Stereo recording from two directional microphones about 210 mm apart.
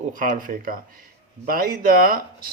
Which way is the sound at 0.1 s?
40° right (ahead or behind).